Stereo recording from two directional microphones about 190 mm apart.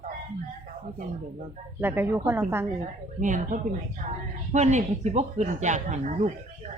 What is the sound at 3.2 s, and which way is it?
A woman's voice, 40° right (ahead or behind).